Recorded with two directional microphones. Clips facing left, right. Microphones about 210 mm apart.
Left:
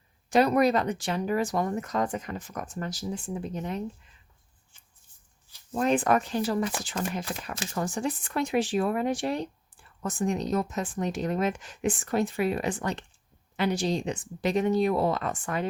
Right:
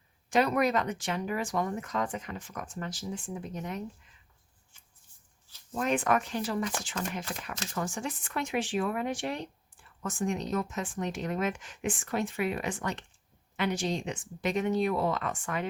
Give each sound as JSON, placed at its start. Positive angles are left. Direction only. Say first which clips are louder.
{"t": 0.3, "sound": "speech", "louder": "left 4 dB", "side_deg": 35}
{"t": 5.7, "sound": "speech", "louder": "left 4 dB", "side_deg": 35}